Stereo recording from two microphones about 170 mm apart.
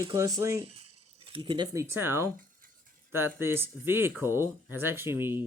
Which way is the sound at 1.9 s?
15° right (ahead or behind).